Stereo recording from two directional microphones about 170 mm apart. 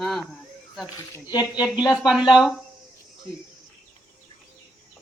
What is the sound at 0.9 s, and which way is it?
Speech, 20° left (ahead or behind).